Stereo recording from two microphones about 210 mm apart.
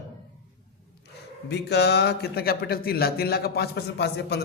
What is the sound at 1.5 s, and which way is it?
Speech, 55° left (ahead or behind).